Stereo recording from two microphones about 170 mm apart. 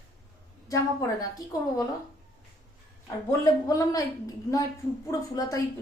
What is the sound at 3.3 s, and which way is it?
Speech, 20° left (ahead or behind).